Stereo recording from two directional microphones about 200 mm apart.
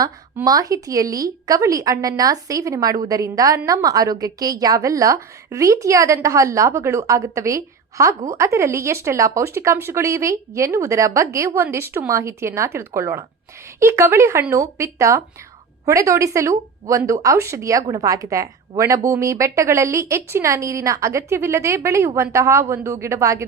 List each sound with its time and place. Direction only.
0.0 s speech: 20° right (ahead or behind)